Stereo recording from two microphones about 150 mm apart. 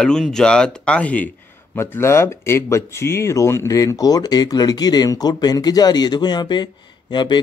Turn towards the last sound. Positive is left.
turn(degrees=30)  # may be behind; listen again after turning